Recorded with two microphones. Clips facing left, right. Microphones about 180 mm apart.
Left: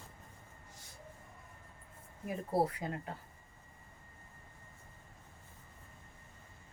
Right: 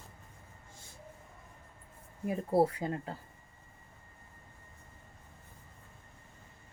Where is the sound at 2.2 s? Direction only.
25° right (ahead or behind).